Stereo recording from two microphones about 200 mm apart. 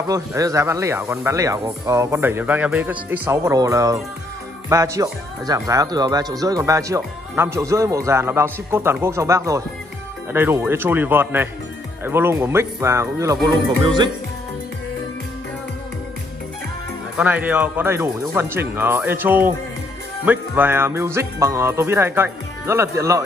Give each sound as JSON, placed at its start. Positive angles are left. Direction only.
{"t": 0.1, "sound": "speech", "side_deg": -15}
{"t": 17.2, "sound": "speech", "side_deg": -5}